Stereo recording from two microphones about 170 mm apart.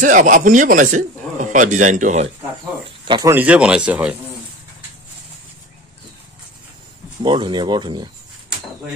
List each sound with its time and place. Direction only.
0.0 s speech: 50° right (ahead or behind)
3.3 s speech: 10° right (ahead or behind)
7.2 s speech: 25° right (ahead or behind)